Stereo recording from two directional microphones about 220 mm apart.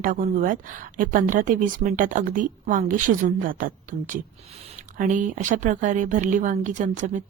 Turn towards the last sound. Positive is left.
turn(degrees=-35)  # may be behind; listen again after turning